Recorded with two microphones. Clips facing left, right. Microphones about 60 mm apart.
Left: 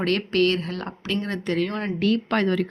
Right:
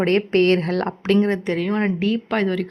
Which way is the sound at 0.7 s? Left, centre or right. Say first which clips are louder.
Right 9 dB; right.